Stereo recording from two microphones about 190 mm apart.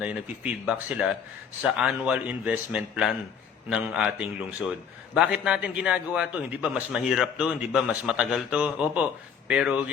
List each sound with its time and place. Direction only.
0.0 s a man's voice: 5° right (ahead or behind)